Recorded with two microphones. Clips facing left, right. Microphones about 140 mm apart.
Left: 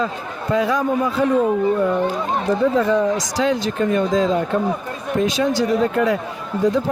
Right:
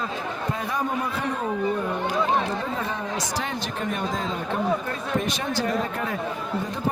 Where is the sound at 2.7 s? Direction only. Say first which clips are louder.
Left 12 dB; 90° left.